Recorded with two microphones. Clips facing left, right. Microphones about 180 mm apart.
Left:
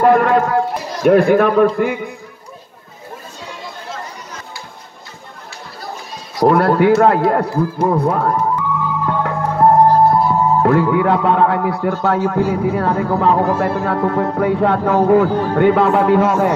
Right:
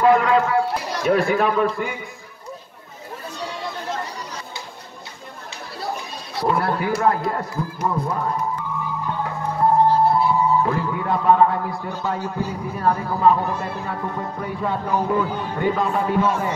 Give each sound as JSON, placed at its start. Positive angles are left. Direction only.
{"t": 0.0, "sound": "a sound", "side_deg": 55}
{"t": 6.4, "sound": "a man's voice", "side_deg": 65}
{"t": 7.9, "sound": "music", "side_deg": 65}
{"t": 10.3, "sound": "a man's voice", "side_deg": 70}